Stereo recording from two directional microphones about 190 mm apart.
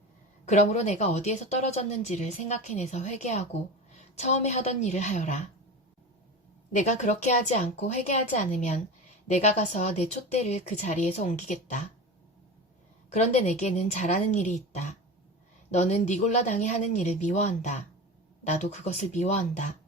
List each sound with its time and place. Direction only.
0.4 s a woman's voice: 40° left (ahead or behind)
6.7 s a woman's voice: 40° left (ahead or behind)
13.1 s a woman's voice: 40° left (ahead or behind)